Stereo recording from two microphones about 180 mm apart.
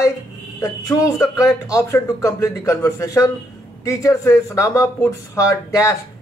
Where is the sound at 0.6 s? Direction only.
15° left (ahead or behind).